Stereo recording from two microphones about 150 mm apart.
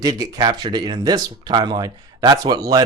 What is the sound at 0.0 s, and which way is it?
Speech, 25° right (ahead or behind).